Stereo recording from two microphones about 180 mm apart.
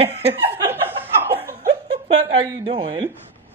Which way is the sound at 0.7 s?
10° right (ahead or behind).